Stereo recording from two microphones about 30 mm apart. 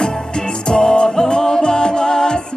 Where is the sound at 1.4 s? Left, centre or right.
Left.